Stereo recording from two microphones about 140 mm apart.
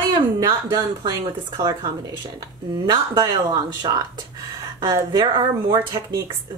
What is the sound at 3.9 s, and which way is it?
Speech, 40° right (ahead or behind).